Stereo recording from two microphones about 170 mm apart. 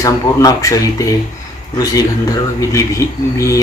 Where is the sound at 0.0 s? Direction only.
20° left (ahead or behind).